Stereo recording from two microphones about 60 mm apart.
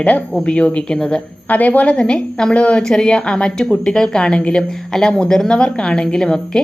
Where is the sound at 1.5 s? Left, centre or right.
Left.